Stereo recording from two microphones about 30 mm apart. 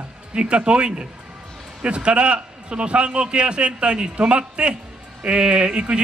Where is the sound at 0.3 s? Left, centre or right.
Right.